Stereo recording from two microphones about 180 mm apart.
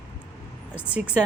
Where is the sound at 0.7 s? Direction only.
5° right (ahead or behind).